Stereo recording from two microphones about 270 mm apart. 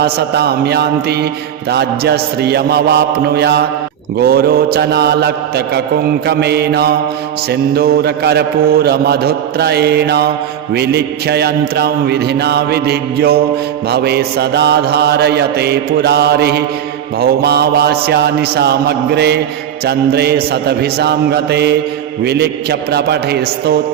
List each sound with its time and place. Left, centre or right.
0.0 s mantra: right